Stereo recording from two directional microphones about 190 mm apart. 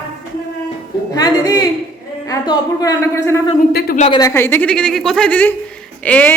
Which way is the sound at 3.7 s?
55° left (ahead or behind).